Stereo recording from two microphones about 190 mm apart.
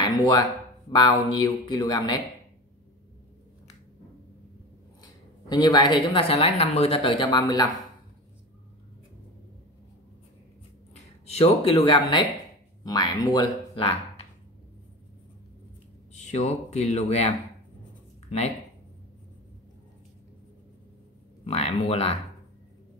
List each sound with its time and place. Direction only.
0.0 s a sound: 20° left (ahead or behind)
0.9 s speech: 25° left (ahead or behind)
5.5 s speech: 20° left (ahead or behind)
11.2 s speech: 35° left (ahead or behind)
16.2 s speech: 35° left (ahead or behind)
21.5 s speech: 35° left (ahead or behind)